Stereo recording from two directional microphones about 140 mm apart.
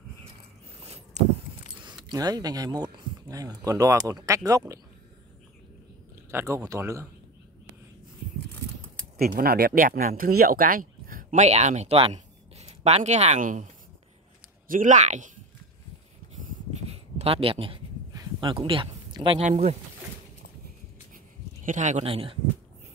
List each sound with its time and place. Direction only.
0.8 s a sound: 50° right (ahead or behind)
2.0 s speech: 30° right (ahead or behind)
6.3 s speech: 20° right (ahead or behind)
9.2 s speech: 90° right; by 13.7 s 60° right (ahead or behind)
14.7 s speech: 70° right (ahead or behind)
16.9 s a sound: 45° right (ahead or behind)
18.4 s speech: 40° right (ahead or behind)
21.6 s speech: 60° right (ahead or behind)
22.0 s speech: 40° right (ahead or behind)